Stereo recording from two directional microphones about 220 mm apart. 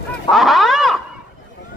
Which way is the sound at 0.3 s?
Centre (ahead or behind).